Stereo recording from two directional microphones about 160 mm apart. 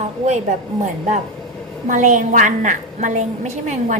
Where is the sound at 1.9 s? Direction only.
50° right (ahead or behind).